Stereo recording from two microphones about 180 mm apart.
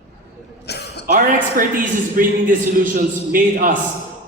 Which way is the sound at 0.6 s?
65° left (ahead or behind).